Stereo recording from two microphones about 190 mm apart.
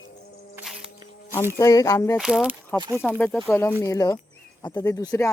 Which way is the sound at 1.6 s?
15° left (ahead or behind).